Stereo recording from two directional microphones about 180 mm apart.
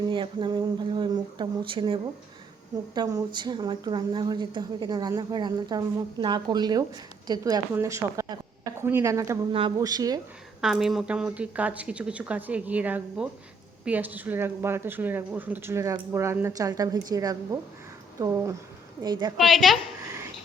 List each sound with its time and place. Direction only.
0.0 s a woman's voice: 25° right (ahead or behind)
9.5 s a woman's voice: 30° right (ahead or behind)
10.6 s a woman's voice: centre (ahead or behind); by 19.3 s 20° right (ahead or behind)
19.4 s a woman's voice: centre (ahead or behind)